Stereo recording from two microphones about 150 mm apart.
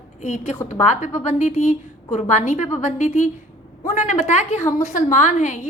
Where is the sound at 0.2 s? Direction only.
55° left (ahead or behind).